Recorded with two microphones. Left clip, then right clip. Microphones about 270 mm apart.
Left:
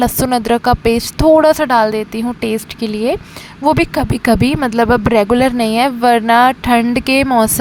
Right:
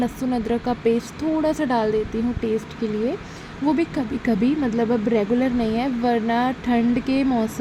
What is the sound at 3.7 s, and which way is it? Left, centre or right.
Speech, left.